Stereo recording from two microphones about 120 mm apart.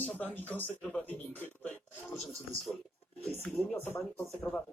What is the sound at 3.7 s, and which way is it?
Speech, 20° left (ahead or behind).